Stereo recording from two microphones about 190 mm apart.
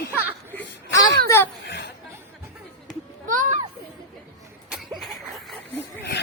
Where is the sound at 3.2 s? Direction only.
45° right (ahead or behind).